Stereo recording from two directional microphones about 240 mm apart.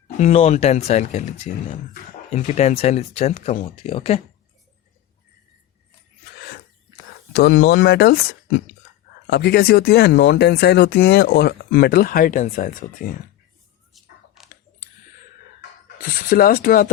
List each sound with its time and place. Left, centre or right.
0.2 s speech: left
7.3 s speech: left
13.9 s a sound: centre
16.0 s speech: left